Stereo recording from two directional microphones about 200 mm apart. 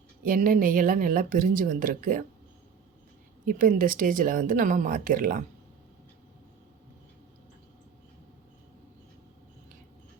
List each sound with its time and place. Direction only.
0.3 s speech: 45° right (ahead or behind)
3.4 s speech: 45° right (ahead or behind)